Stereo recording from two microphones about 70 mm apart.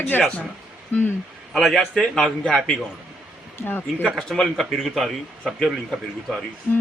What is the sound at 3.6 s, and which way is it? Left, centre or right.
Speech, left.